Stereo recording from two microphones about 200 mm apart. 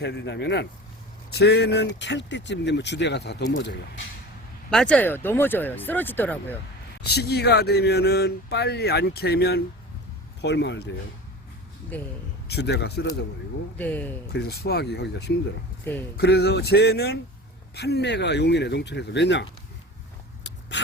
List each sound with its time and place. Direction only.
0.0 s speech: 60° left (ahead or behind)
4.7 s speech: 5° left (ahead or behind)
7.1 s speech: 55° left (ahead or behind)
11.9 s speech: 10° left (ahead or behind)
12.5 s speech: 55° left (ahead or behind)
13.7 s speech: 10° left (ahead or behind)
14.3 s speech: 55° left (ahead or behind)
15.8 s speech: 10° left (ahead or behind)
16.1 s speech: 55° left (ahead or behind)
20.4 s a sound: 60° left (ahead or behind)